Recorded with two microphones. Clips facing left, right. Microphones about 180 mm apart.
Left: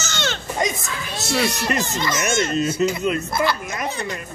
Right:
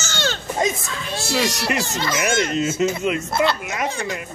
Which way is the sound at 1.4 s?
75° right (ahead or behind).